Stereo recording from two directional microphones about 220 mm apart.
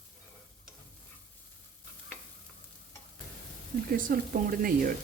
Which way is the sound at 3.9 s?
40° right (ahead or behind).